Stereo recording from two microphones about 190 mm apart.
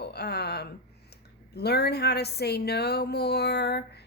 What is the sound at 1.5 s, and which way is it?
Speech, 60° left (ahead or behind).